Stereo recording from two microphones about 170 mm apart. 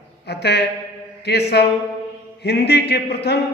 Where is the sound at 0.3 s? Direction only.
75° left (ahead or behind).